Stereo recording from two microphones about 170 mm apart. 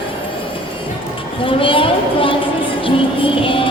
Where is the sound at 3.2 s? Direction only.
30° left (ahead or behind).